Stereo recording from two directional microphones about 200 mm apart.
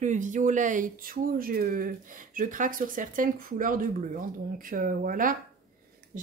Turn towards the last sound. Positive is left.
turn(degrees=-40)  # may be behind; listen again after turning